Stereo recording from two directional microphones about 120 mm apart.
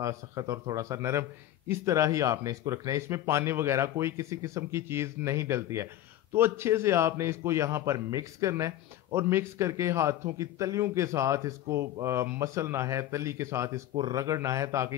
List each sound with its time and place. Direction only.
0.0 s a man's voice: 25° right (ahead or behind)